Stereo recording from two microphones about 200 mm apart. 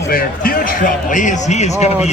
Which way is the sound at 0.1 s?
45° left (ahead or behind).